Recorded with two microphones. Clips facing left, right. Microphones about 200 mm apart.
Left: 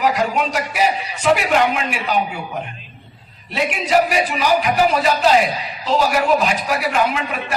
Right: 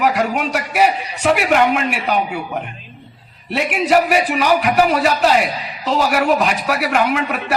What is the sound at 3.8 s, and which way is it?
A man's voice, 60° right (ahead or behind).